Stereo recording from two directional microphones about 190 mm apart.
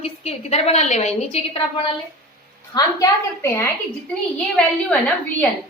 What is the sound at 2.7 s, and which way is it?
Speech, 15° left (ahead or behind).